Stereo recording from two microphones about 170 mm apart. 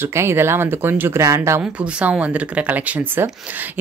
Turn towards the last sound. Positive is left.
turn(degrees=-10)  # may be behind; listen again after turning